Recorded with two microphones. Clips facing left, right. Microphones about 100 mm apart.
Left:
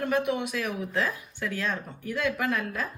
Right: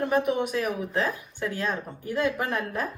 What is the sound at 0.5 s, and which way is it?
Speech, 35° right (ahead or behind).